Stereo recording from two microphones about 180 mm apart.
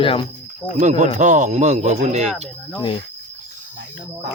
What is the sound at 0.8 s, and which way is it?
Speech, 40° right (ahead or behind).